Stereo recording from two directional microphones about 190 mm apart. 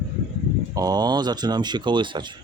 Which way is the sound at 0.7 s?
20° right (ahead or behind).